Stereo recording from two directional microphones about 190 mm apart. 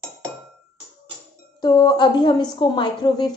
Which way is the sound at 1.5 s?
20° left (ahead or behind).